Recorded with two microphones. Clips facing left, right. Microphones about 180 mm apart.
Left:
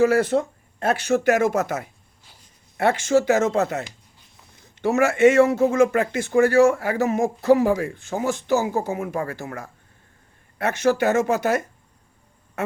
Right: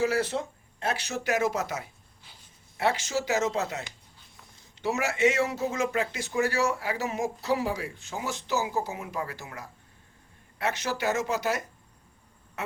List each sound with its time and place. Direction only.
0.0 s speech: 55° left (ahead or behind)
12.6 s quack: 50° left (ahead or behind)